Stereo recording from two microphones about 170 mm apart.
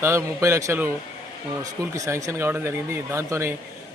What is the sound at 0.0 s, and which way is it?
Speech, 15° right (ahead or behind).